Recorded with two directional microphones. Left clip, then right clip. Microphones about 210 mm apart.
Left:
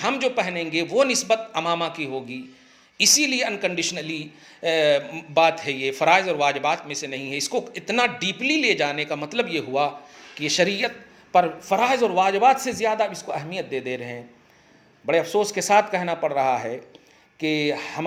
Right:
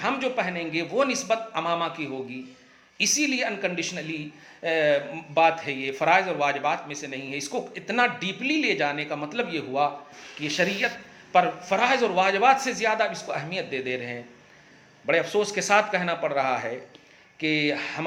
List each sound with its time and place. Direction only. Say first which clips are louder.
0.0 s a woman's voice: left 3 dB; 35° left (ahead or behind)